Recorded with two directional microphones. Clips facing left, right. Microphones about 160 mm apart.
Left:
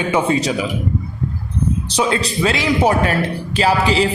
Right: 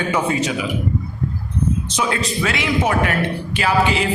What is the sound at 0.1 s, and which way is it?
Speech, 30° left (ahead or behind).